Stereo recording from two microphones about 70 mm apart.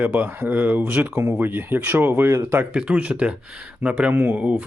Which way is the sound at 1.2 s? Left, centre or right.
Right.